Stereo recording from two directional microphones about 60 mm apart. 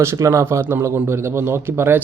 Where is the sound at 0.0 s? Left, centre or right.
Right.